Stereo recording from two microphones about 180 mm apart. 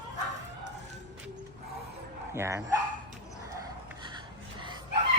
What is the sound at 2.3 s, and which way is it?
Dog, 15° right (ahead or behind).